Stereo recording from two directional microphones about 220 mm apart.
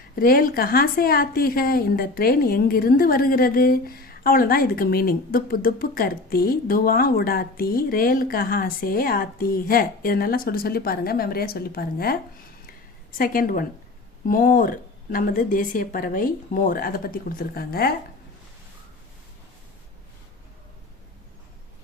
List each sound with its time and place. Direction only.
0.2 s a woman's voice: 40° left (ahead or behind)